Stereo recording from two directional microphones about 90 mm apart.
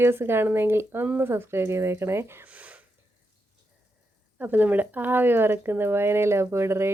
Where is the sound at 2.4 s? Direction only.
15° right (ahead or behind).